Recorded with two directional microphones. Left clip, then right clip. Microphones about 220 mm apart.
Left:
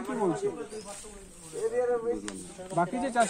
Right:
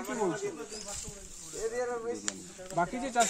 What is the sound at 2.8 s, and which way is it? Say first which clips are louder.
Speech: left 2 dB; 10° left (ahead or behind).